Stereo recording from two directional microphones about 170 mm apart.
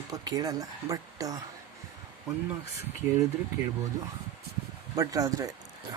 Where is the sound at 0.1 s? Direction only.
20° right (ahead or behind).